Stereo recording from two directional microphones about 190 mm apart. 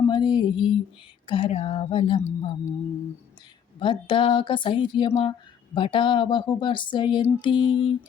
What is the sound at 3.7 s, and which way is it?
Speech, 25° left (ahead or behind).